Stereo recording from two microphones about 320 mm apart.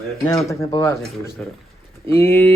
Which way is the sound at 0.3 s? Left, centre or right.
Centre.